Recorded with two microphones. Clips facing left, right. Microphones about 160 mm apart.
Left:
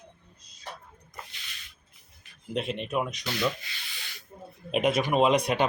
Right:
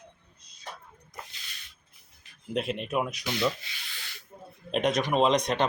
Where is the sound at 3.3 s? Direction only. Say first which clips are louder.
Right 1 dB; 15° right (ahead or behind).